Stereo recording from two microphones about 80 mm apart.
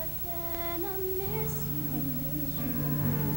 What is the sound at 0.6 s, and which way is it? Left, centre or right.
Music, right.